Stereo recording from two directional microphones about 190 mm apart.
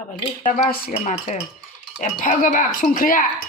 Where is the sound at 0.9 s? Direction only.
35° left (ahead or behind).